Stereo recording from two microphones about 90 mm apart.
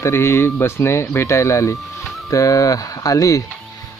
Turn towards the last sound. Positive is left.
turn(degrees=40)  # may be behind; listen again after turning